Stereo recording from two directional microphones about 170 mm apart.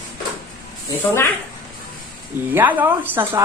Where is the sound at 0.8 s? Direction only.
15° left (ahead or behind).